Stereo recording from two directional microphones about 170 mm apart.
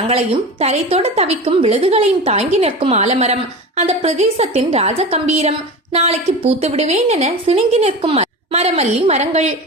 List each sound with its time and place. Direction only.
0.1 s a woman's voice: 40° right (ahead or behind)